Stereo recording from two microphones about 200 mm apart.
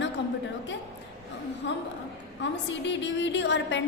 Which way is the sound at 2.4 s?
65° left (ahead or behind).